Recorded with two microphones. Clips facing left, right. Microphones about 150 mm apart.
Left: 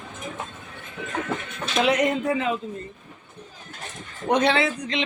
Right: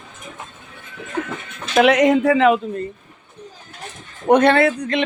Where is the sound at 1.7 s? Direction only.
70° right (ahead or behind).